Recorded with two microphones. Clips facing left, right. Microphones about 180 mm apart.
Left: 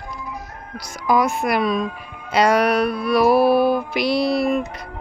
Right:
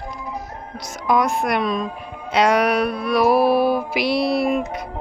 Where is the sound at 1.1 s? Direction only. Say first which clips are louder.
Left 1 dB; centre (ahead or behind).